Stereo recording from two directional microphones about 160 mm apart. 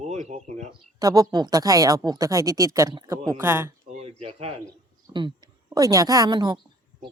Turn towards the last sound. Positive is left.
turn(degrees=-25)  # may be behind; listen again after turning